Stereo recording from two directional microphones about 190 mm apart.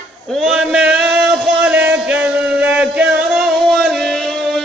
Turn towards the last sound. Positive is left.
turn(degrees=0)  # may be behind; listen again after turning